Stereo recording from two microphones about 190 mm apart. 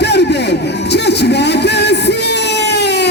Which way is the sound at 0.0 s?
65° left (ahead or behind).